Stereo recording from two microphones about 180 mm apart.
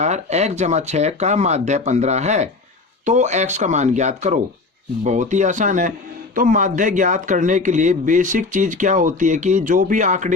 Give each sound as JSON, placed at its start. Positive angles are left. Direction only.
{"t": 0.0, "sound": "speech", "side_deg": -40}